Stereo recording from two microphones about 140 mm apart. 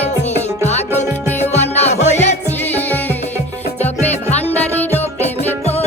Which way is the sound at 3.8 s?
50° left (ahead or behind).